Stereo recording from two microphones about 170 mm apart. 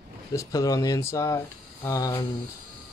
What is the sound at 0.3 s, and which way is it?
Speech, 20° left (ahead or behind).